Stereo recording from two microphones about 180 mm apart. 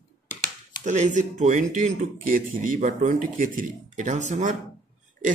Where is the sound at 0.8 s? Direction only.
45° right (ahead or behind).